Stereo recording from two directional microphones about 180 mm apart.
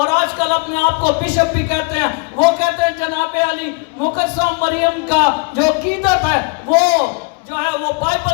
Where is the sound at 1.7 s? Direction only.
20° left (ahead or behind).